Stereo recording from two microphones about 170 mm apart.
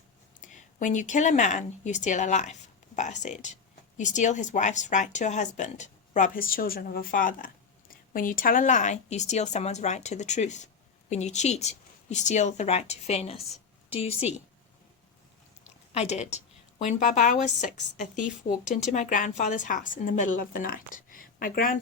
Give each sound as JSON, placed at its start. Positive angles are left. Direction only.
{"t": 0.4, "sound": "speech", "side_deg": 50}
{"t": 16.0, "sound": "speech", "side_deg": 40}